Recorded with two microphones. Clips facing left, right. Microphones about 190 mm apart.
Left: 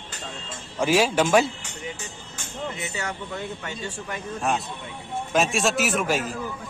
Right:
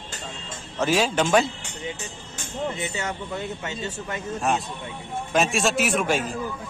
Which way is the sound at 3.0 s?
25° right (ahead or behind).